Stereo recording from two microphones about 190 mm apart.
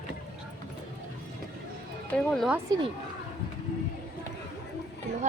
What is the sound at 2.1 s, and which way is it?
Speech, 5° left (ahead or behind).